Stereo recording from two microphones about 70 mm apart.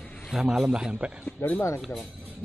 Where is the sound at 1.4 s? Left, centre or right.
Left.